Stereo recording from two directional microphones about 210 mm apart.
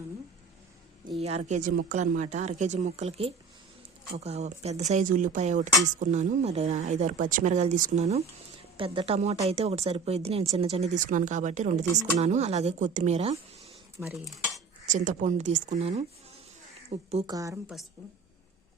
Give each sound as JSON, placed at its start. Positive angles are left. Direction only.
{"t": 1.2, "sound": "speech", "side_deg": -30}
{"t": 14.0, "sound": "cutlery", "side_deg": -10}
{"t": 14.8, "sound": "speech", "side_deg": -35}
{"t": 17.1, "sound": "speech", "side_deg": -30}
{"t": 17.3, "sound": "a woman's voice", "side_deg": -15}